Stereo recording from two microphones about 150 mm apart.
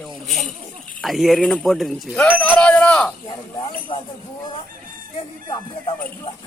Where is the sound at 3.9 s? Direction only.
30° left (ahead or behind).